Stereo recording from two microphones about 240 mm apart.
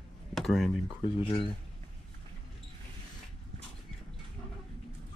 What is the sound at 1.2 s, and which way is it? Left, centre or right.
Speech, left.